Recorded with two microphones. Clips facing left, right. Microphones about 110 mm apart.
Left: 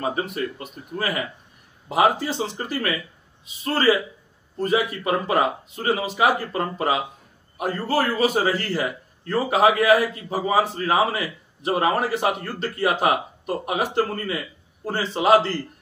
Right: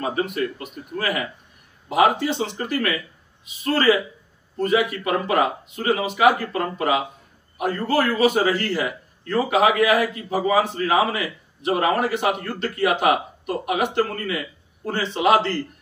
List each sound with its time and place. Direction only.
0.1 s a man's voice: 30° left (ahead or behind)
4.6 s a man's voice: 30° left (ahead or behind)